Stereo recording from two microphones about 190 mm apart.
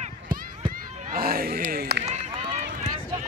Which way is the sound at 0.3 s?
25° right (ahead or behind).